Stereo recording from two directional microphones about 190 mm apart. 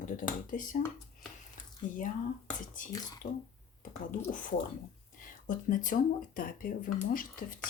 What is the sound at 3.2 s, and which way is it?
Speech, 60° left (ahead or behind).